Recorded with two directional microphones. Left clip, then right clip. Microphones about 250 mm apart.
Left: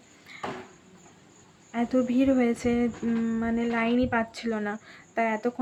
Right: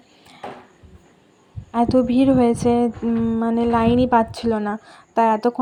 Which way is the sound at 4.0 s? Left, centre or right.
Centre.